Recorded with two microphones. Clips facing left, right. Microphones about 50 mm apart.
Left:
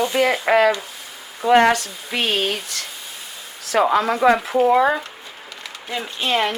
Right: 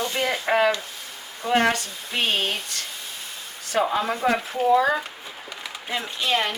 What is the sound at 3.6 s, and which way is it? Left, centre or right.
Speech, left.